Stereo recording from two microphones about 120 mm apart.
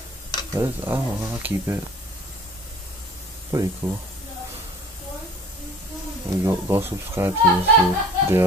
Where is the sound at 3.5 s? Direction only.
25° right (ahead or behind).